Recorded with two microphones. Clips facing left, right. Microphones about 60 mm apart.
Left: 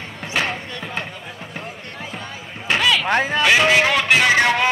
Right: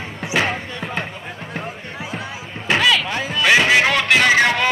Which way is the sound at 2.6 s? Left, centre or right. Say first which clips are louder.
Right 2 dB; centre.